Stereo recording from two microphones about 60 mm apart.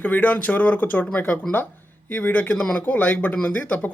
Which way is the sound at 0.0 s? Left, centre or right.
Left.